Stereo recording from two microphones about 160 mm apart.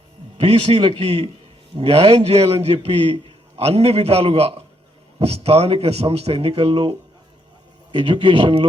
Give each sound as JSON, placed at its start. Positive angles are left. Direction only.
{"t": 0.3, "sound": "speech", "side_deg": -35}
{"t": 7.9, "sound": "speech", "side_deg": -30}